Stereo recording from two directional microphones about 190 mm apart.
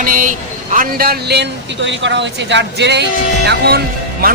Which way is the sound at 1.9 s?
70° right (ahead or behind).